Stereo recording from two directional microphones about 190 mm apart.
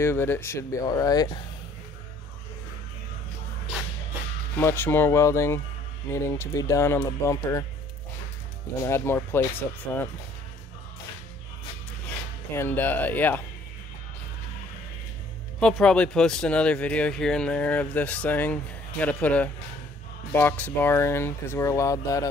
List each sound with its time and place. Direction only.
0.0 s speech: 10° left (ahead or behind)
4.6 s speech: 10° left (ahead or behind)
8.8 s speech: 15° left (ahead or behind)
12.5 s speech: 10° left (ahead or behind)
15.6 s speech: 5° left (ahead or behind)